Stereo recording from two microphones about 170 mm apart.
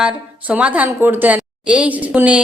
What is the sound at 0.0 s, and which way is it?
A woman's voice, 10° right (ahead or behind).